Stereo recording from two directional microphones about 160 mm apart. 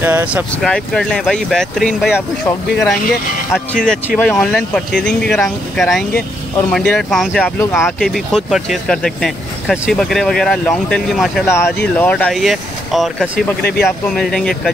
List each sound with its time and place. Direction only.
0.0 s speech: 10° right (ahead or behind)
0.6 s speech: 5° left (ahead or behind)
8.0 s speech: centre (ahead or behind)
11.4 s speech: 15° left (ahead or behind); by 13.3 s centre (ahead or behind)
13.6 s speech: 80° left
14.1 s speech: 5° left (ahead or behind)